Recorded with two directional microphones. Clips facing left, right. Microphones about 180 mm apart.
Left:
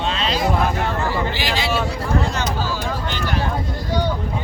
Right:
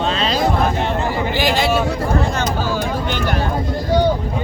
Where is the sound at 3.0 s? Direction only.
55° right (ahead or behind).